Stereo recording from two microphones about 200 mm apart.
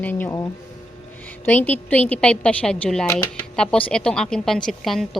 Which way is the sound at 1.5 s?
10° left (ahead or behind).